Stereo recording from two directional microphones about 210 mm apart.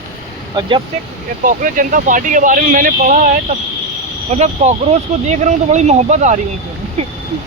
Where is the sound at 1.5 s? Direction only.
40° right (ahead or behind).